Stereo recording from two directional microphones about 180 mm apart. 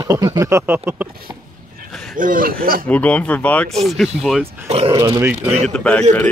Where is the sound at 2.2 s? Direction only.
50° right (ahead or behind).